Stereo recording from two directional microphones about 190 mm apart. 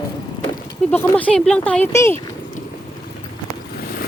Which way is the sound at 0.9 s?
10° left (ahead or behind).